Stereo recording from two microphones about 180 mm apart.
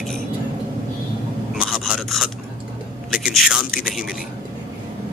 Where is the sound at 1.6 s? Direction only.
5° right (ahead or behind).